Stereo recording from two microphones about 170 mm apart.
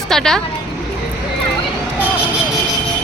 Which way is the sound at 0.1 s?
5° left (ahead or behind).